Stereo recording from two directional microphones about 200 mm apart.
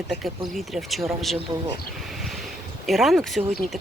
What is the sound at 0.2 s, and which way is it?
Speech, centre (ahead or behind).